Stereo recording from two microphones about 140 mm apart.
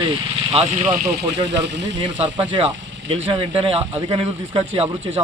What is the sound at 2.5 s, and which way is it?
Speech, 45° right (ahead or behind).